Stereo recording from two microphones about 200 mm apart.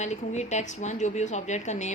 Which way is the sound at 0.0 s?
35° left (ahead or behind).